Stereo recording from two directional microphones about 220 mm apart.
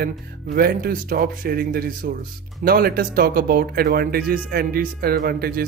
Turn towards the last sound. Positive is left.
turn(degrees=-45)  # may be behind; listen again after turning